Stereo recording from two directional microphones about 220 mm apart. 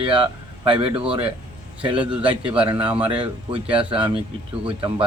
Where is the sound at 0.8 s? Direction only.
5° right (ahead or behind).